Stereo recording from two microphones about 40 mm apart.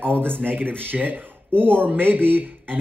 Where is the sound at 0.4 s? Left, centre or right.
Right.